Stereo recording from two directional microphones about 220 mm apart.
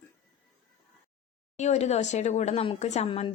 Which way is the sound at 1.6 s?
30° left (ahead or behind).